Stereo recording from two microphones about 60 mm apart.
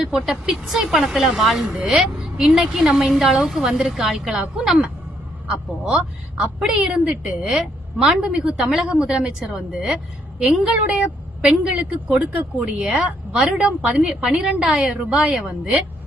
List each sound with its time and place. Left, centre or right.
0.0 s a woman's voice: centre
7.3 s a woman's voice: centre
8.2 s a woman's voice: centre